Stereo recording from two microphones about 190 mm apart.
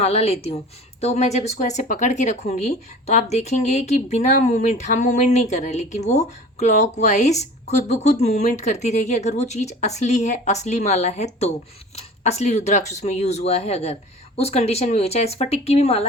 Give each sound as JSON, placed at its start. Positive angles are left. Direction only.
{"t": 0.0, "sound": "speech", "side_deg": 35}